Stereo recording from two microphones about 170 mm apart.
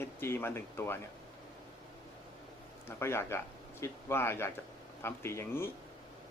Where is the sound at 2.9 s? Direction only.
15° left (ahead or behind).